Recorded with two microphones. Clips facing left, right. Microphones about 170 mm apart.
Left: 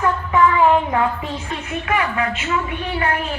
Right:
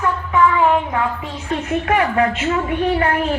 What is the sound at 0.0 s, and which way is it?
Music, 5° left (ahead or behind).